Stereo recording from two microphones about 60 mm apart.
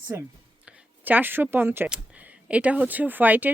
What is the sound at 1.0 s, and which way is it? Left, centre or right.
Speech, right.